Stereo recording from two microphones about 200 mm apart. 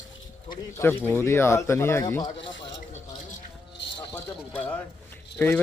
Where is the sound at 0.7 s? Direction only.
10° left (ahead or behind).